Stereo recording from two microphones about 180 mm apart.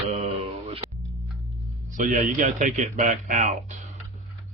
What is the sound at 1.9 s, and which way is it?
A man's voice, 45° right (ahead or behind).